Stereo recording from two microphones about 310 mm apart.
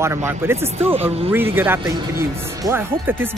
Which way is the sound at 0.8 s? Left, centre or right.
Centre.